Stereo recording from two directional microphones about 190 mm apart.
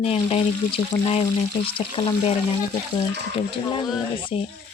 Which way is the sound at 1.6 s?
30° left (ahead or behind).